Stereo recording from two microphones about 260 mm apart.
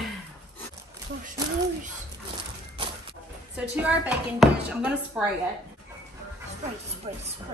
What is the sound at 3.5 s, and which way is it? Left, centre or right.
Speech, centre.